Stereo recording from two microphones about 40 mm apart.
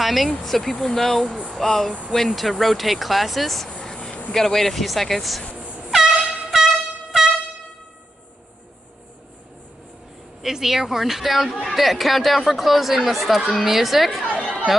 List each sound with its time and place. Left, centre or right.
0.0 s speech: centre
3.8 s a sound: centre
4.3 s speech: centre
5.9 s air horn: centre
10.4 s a woman's voice: centre